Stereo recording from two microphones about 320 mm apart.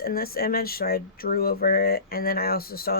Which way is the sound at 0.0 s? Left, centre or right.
Left.